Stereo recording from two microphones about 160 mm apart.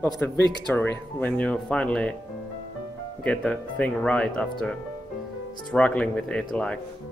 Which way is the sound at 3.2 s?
10° left (ahead or behind).